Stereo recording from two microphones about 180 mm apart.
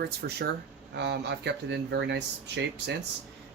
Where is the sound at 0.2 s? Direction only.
65° right (ahead or behind).